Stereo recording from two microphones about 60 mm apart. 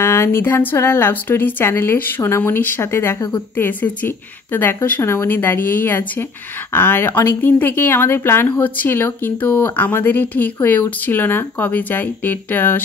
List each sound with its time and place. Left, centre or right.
0.0 s speech: left
3.5 s speech: left
5.0 s speech: left